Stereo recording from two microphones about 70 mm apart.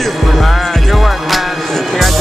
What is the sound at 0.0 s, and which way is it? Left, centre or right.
Music, centre.